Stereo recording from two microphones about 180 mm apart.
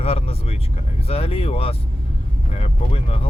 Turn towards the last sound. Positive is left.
turn(degrees=35)  # may be behind; listen again after turning